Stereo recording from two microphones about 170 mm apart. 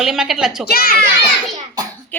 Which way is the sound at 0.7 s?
65° left (ahead or behind).